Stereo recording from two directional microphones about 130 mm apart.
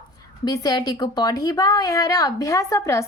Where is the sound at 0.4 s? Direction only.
30° left (ahead or behind).